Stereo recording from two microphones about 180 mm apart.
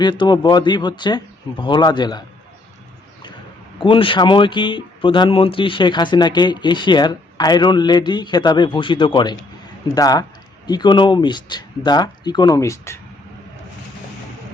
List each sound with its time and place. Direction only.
0.0 s speech: 25° left (ahead or behind)
3.8 s speech: 30° left (ahead or behind)